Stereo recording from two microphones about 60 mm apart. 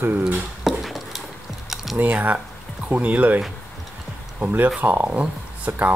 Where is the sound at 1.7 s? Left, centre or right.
Centre.